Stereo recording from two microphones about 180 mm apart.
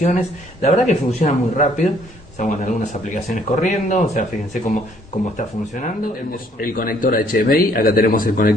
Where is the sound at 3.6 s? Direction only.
40° left (ahead or behind).